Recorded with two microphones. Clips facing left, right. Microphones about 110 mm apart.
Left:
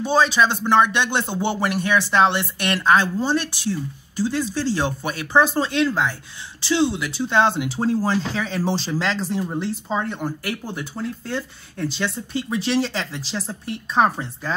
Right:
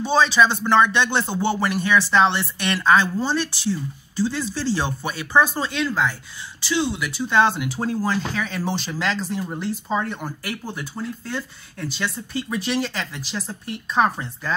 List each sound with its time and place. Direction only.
0.0 s speech: 10° left (ahead or behind); by 9.4 s 30° left (ahead or behind)
9.4 s speech: 20° left (ahead or behind)